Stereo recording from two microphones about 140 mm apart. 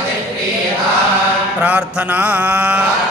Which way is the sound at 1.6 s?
10° right (ahead or behind).